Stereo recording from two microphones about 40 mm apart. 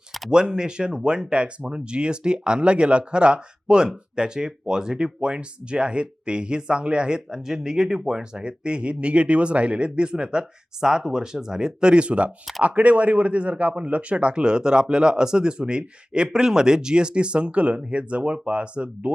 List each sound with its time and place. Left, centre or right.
0.3 s speech: right